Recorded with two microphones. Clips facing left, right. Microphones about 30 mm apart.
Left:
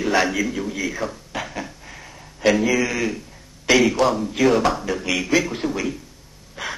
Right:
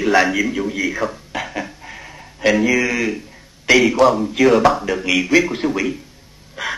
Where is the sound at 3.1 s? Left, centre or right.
Centre.